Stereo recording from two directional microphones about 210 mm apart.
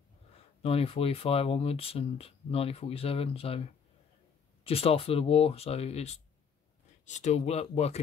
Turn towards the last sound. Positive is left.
turn(degrees=30)  # may be behind; listen again after turning